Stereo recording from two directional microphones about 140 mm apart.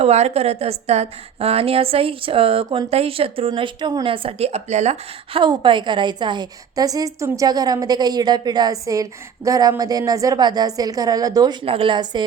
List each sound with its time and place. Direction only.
0.0 s a woman's voice: 50° right (ahead or behind)
5.4 s a woman's voice: 35° right (ahead or behind)
11.6 s a woman's voice: 40° right (ahead or behind)